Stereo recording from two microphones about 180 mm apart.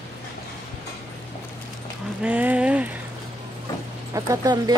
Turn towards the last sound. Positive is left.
turn(degrees=-20)  # may be behind; listen again after turning